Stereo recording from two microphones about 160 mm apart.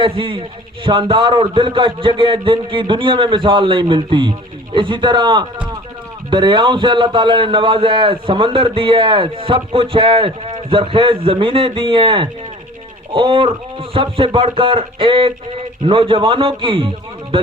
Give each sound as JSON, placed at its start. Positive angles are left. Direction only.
{"t": 0.0, "sound": "a man's voice", "side_deg": -35}